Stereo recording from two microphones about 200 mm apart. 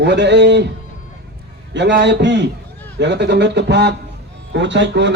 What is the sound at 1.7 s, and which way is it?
A man's voice, 60° right (ahead or behind).